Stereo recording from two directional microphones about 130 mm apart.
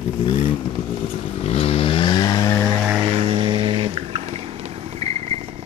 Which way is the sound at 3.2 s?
50° right (ahead or behind).